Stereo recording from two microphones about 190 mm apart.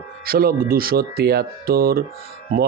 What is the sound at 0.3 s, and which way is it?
A man's voice, 50° right (ahead or behind).